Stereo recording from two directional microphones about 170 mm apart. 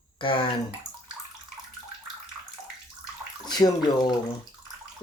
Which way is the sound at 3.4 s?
25° left (ahead or behind).